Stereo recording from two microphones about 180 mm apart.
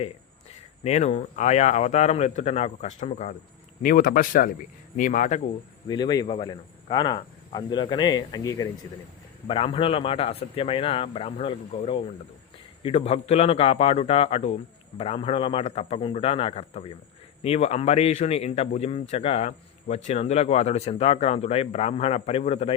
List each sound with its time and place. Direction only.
0.9 s a man's voice: 35° left (ahead or behind)
3.8 s speech: 50° left (ahead or behind)
5.9 s a man's voice: 25° left (ahead or behind)
9.5 s a man's voice: 30° left (ahead or behind)